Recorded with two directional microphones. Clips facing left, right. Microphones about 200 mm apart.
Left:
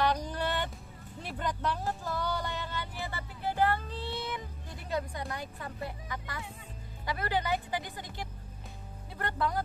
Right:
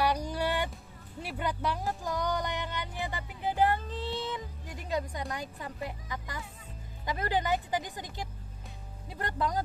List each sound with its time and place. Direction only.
0.0 s music: 10° right (ahead or behind)
1.2 s speech: 10° right (ahead or behind)